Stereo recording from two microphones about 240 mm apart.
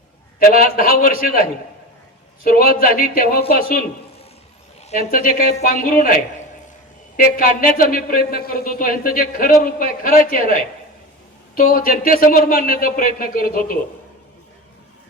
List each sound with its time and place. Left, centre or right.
0.3 s speech: left
5.1 s speech: left
7.2 s speech: left